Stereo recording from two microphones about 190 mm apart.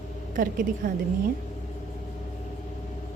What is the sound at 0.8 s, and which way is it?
Speech, 45° right (ahead or behind).